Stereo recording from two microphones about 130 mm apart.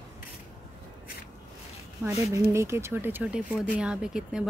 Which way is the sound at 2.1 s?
25° right (ahead or behind).